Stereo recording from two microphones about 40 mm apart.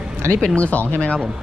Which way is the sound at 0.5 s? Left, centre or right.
Left.